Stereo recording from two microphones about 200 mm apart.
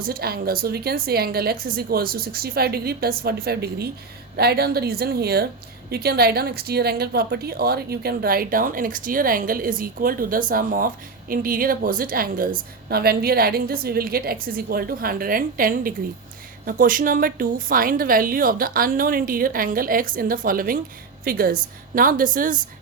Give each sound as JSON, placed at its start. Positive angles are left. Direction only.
{"t": 0.0, "sound": "a woman's voice", "side_deg": -50}